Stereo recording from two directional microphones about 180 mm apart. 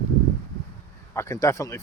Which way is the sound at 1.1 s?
15° left (ahead or behind).